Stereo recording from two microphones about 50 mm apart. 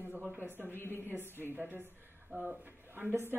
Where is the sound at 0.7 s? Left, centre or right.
Left.